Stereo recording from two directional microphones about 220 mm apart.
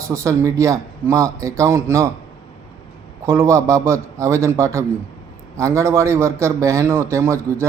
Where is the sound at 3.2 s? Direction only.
15° right (ahead or behind).